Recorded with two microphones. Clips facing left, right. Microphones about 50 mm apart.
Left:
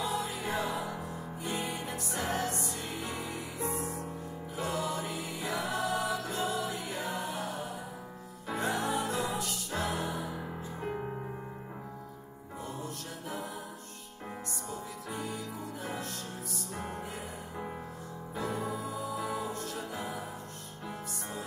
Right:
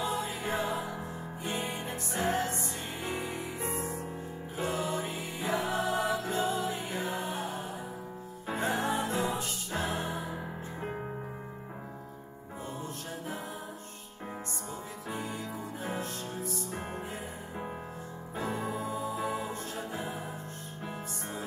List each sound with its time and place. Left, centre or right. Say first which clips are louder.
0.0 s music: right 1 dB; right
15.0 s music: right 2 dB; right
18.3 s music: right 1 dB; right